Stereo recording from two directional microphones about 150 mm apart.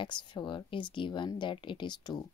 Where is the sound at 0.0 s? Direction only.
35° left (ahead or behind).